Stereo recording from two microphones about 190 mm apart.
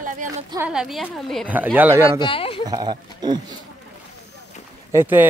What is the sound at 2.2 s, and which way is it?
Speech, 25° left (ahead or behind).